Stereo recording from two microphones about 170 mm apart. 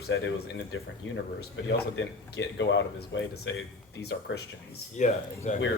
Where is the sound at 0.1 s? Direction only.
90° left.